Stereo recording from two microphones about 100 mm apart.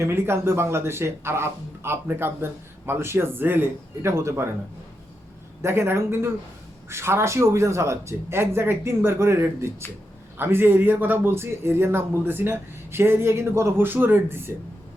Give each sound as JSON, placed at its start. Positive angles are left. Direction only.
{"t": 0.0, "sound": "speech", "side_deg": -25}
{"t": 5.6, "sound": "speech", "side_deg": -25}